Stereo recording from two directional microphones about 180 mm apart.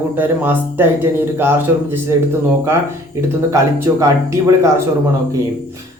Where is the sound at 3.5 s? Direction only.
20° right (ahead or behind).